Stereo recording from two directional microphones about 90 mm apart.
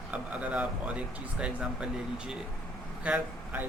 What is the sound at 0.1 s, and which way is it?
A man's voice, 15° right (ahead or behind).